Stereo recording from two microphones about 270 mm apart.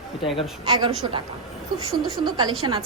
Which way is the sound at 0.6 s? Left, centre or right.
Centre.